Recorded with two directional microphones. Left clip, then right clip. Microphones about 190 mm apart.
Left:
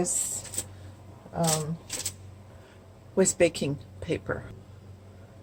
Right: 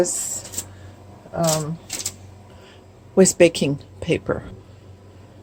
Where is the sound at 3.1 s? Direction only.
30° right (ahead or behind).